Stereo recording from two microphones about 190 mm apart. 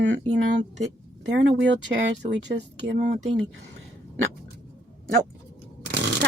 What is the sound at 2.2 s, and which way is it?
Speech, 65° right (ahead or behind).